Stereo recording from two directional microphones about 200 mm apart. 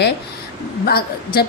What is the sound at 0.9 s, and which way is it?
Speech, 50° left (ahead or behind).